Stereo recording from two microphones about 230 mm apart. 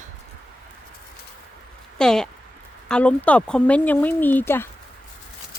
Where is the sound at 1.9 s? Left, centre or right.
Centre.